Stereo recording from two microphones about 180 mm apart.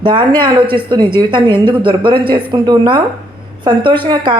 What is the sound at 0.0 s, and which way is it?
Speech, 25° right (ahead or behind).